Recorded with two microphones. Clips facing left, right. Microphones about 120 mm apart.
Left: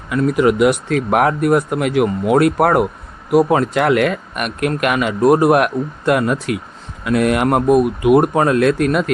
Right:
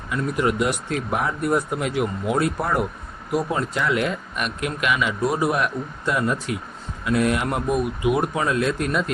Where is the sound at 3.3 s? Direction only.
90° left.